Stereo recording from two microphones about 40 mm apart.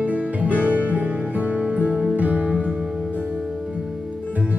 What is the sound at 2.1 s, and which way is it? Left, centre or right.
Music, right.